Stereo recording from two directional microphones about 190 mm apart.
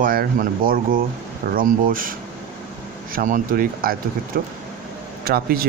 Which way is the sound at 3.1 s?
45° right (ahead or behind).